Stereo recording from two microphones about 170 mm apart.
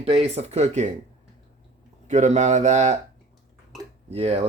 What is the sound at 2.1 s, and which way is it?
Speech, 45° right (ahead or behind).